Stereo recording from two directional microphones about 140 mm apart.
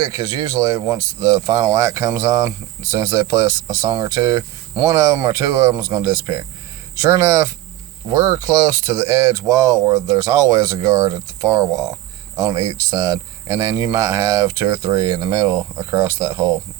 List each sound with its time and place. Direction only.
0.0 s speech: 25° right (ahead or behind)